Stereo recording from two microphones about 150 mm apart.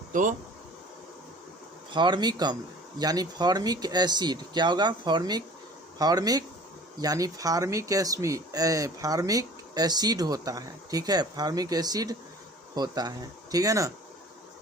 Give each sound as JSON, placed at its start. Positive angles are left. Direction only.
{"t": 0.1, "sound": "speech", "side_deg": -60}
{"t": 1.9, "sound": "speech", "side_deg": -30}